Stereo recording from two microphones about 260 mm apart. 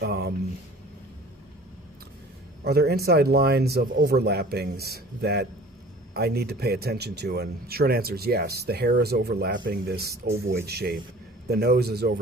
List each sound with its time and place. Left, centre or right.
0.0 s speech: right
2.6 s speech: right